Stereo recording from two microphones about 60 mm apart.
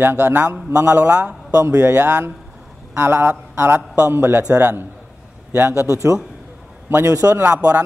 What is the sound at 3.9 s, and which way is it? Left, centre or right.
Speech, right.